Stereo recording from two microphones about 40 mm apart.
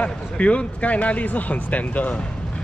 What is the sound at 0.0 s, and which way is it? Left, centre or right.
Speech, left.